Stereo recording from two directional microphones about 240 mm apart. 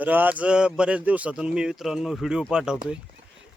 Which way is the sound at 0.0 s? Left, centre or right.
Centre.